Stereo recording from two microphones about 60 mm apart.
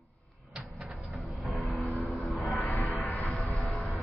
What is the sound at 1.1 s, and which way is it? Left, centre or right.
Vehicle, centre.